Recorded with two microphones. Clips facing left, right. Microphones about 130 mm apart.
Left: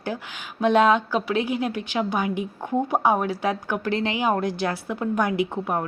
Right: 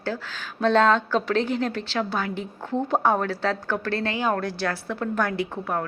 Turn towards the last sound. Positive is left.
turn(degrees=20)  # may be behind; listen again after turning